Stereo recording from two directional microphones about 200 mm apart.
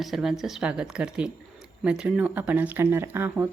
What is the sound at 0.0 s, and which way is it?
Speech, centre (ahead or behind).